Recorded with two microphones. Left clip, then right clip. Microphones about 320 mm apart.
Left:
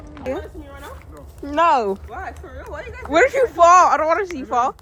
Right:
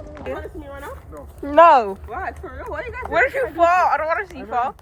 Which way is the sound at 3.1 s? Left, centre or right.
Centre.